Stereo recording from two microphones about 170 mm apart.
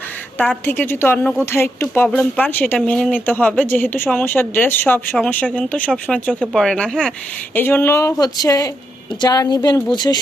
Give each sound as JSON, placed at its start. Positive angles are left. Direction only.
{"t": 0.3, "sound": "a woman's voice", "side_deg": 10}